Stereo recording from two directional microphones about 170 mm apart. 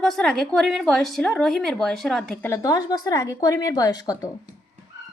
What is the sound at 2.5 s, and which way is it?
A woman's voice, 20° left (ahead or behind).